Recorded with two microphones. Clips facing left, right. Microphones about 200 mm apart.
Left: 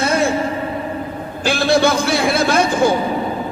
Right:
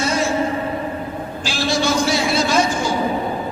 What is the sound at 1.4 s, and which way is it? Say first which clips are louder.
Speech: left 6 dB; 55° left (ahead or behind).